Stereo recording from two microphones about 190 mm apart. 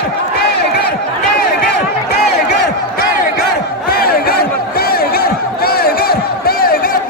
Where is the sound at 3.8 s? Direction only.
55° left (ahead or behind).